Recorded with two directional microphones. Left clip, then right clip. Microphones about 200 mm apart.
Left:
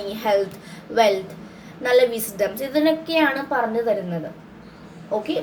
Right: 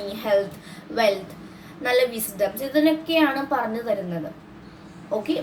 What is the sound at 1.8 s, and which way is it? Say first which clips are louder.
A woman's voice: left 4 dB; 15° left (ahead or behind).